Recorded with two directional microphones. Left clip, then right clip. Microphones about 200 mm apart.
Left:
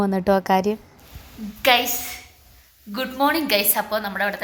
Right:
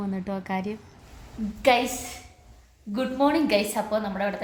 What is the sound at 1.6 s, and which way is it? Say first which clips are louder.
Speech: left 3 dB; centre (ahead or behind).